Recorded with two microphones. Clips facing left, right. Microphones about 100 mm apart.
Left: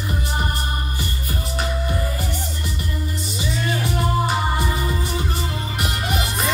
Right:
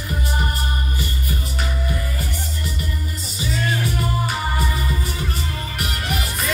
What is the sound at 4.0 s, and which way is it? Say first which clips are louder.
Music: left 3 dB; 30° left (ahead or behind).